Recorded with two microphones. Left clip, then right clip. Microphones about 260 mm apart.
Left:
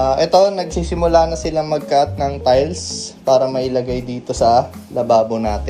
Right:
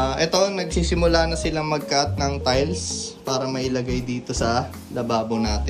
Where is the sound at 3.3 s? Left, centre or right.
Centre.